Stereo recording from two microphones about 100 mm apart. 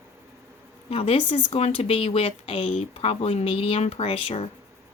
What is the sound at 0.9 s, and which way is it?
Speech, 75° left (ahead or behind).